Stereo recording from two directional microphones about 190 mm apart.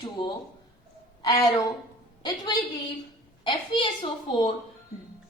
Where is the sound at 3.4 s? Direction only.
25° left (ahead or behind).